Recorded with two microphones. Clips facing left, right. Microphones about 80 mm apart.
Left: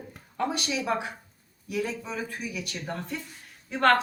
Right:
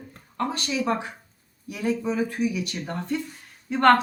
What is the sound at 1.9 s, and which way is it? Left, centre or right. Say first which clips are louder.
Speech: right 9 dB; centre.